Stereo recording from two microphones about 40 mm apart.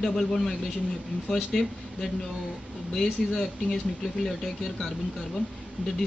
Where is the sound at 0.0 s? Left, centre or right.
Centre.